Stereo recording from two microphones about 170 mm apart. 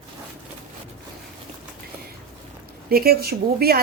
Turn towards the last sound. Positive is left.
turn(degrees=-65)  # may be behind; listen again after turning